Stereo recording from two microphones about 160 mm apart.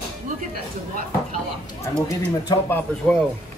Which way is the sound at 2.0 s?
25° left (ahead or behind).